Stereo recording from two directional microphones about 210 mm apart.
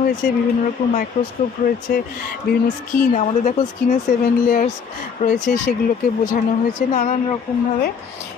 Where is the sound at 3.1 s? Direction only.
35° left (ahead or behind).